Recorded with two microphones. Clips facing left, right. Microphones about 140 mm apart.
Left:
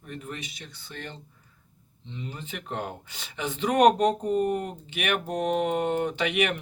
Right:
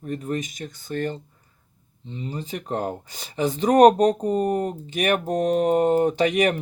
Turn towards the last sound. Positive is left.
turn(degrees=-40)  # may be behind; listen again after turning